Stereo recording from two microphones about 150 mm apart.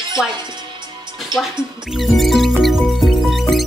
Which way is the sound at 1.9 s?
Centre (ahead or behind).